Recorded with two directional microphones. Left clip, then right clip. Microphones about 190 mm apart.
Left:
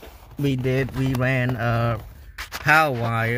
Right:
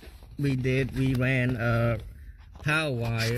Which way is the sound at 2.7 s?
10° left (ahead or behind).